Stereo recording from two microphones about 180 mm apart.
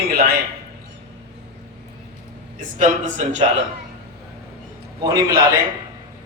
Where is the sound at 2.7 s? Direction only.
45° right (ahead or behind).